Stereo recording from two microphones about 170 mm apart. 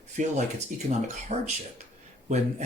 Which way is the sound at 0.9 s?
40° right (ahead or behind).